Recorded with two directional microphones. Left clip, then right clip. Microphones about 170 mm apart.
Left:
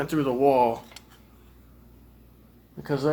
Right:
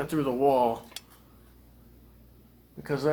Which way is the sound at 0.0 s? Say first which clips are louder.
Left 3 dB; 20° left (ahead or behind).